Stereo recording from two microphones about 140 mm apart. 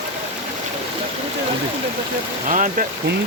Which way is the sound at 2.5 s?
70° right (ahead or behind).